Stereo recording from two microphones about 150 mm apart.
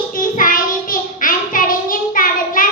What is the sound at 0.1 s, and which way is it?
Child singing, 65° left (ahead or behind).